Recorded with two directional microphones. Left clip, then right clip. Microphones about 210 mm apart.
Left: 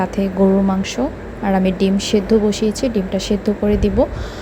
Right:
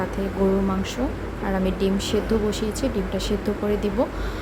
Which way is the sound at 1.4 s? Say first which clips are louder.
Left 7 dB; 25° left (ahead or behind).